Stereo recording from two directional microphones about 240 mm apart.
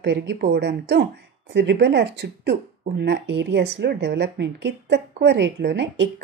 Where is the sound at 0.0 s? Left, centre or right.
Right.